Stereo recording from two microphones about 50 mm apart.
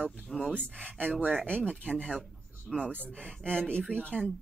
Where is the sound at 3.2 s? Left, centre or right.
Centre.